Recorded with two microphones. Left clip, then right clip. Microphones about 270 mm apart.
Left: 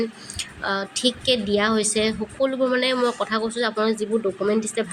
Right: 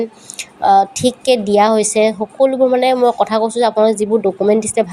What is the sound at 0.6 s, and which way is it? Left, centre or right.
A woman's voice, centre.